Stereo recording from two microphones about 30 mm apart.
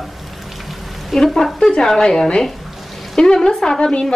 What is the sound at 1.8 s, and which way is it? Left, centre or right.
A woman's voice, centre.